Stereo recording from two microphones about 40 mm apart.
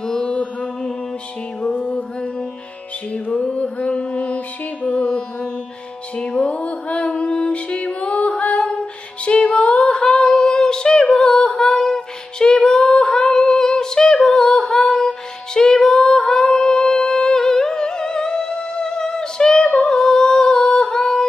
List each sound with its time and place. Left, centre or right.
0.0 s mantra: centre
1.6 s music: left
3.8 s mantra: left
5.0 s carnatic music: left
6.4 s music: left
10.4 s humming: centre
11.2 s female singing: centre
12.6 s singing: left
14.5 s music: centre
16.1 s humming: centre
20.7 s yodeling: centre